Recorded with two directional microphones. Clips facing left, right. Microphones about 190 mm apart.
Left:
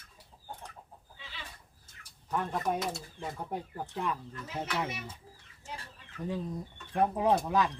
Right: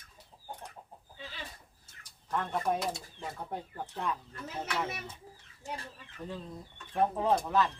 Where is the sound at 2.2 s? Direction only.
5° left (ahead or behind).